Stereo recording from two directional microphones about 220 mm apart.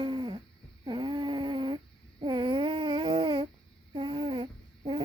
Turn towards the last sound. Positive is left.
turn(degrees=-25)  # may be behind; listen again after turning